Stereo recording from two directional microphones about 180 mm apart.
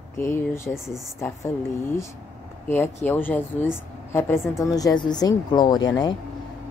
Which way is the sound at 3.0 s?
10° left (ahead or behind).